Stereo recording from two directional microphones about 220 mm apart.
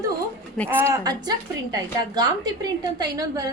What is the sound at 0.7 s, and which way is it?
A woman's voice, 10° right (ahead or behind).